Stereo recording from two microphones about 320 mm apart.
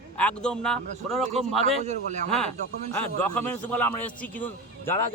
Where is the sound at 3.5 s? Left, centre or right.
Centre.